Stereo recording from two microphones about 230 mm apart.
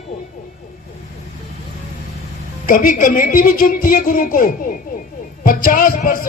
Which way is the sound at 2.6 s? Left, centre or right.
Left.